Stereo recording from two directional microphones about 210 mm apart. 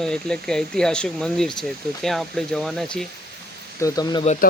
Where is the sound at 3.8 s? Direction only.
15° left (ahead or behind).